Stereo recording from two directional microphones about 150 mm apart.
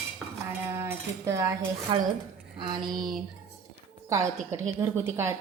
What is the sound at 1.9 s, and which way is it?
Speech, 30° right (ahead or behind).